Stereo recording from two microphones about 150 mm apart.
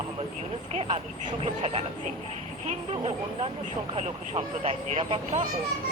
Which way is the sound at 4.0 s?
45° right (ahead or behind).